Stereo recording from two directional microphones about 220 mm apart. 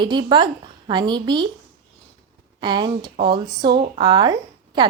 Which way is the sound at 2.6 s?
20° right (ahead or behind).